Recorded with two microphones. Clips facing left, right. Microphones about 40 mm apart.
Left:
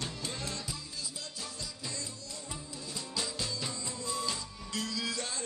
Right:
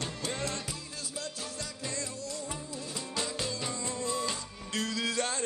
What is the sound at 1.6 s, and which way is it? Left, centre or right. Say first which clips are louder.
Music: right 5 dB; right.